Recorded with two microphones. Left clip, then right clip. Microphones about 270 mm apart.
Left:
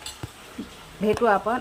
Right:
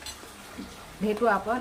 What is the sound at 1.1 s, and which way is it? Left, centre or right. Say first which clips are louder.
Speech: left 4 dB; centre.